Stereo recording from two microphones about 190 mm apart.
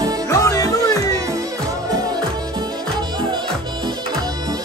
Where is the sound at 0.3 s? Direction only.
15° left (ahead or behind).